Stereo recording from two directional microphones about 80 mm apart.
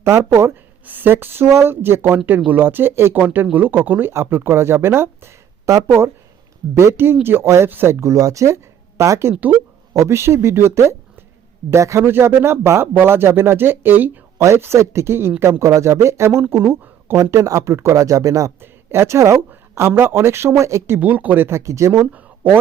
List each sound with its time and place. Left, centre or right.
0.0 s speech: right
0.9 s speech: right
14.3 s speech: right
18.6 s a woman's voice: right
19.5 s a sound: right
20.0 s speech: right
21.0 s speech: right